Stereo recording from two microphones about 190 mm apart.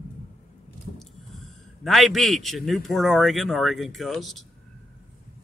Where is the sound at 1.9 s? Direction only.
Centre (ahead or behind).